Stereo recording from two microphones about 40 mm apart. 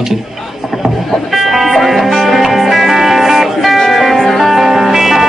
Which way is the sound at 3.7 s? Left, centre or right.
Centre.